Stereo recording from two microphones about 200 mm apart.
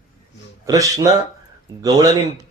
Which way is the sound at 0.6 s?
15° right (ahead or behind).